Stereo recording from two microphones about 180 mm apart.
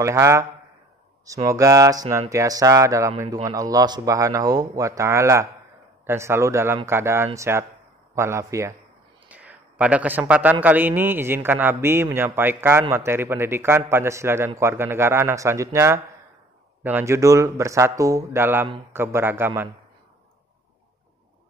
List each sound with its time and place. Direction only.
0.0 s a man's voice: 15° right (ahead or behind)